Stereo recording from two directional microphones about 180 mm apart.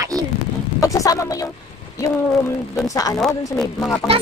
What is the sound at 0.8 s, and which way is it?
Speech, 20° left (ahead or behind).